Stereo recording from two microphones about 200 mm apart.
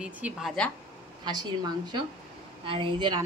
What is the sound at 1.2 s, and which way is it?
Speech, 20° right (ahead or behind).